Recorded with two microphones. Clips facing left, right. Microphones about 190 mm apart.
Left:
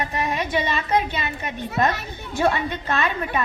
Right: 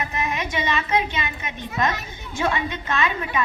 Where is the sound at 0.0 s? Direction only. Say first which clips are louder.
Left 2 dB; 35° left (ahead or behind).